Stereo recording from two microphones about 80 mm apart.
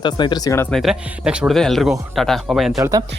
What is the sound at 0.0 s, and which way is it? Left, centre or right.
Speech, left.